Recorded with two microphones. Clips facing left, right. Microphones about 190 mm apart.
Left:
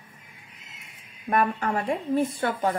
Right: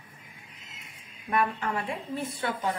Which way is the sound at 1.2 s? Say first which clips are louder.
Left 4 dB; 45° left (ahead or behind).